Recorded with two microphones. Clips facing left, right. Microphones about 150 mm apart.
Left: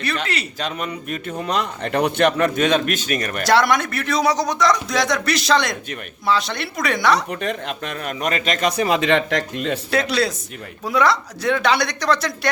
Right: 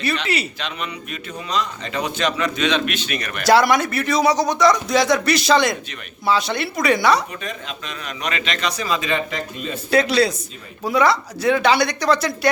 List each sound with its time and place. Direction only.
0.6 s a man's voice: 45° left (ahead or behind)
3.4 s a man's voice: centre (ahead or behind)
7.4 s a man's voice: 60° left (ahead or behind); by 9.7 s 75° left (ahead or behind)
9.9 s a man's voice: centre (ahead or behind)